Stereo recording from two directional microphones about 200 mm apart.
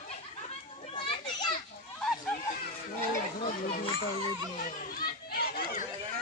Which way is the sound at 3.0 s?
45° left (ahead or behind).